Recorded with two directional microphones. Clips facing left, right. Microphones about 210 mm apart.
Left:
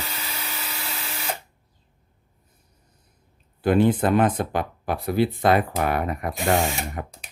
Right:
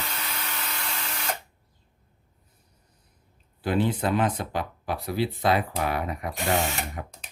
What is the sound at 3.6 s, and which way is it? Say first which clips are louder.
Speech: left 6 dB; 50° left (ahead or behind).